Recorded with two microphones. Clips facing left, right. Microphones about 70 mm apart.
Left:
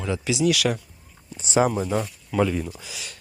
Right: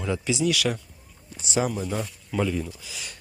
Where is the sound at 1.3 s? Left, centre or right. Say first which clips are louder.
Left 5 dB; left.